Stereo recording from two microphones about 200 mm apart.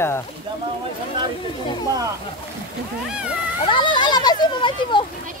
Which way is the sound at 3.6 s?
25° left (ahead or behind).